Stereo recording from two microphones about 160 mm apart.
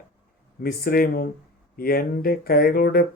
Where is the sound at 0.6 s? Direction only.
70° left (ahead or behind).